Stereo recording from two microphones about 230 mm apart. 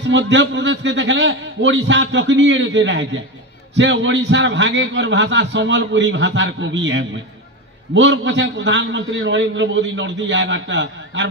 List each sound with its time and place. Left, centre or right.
0.1 s a man's voice: right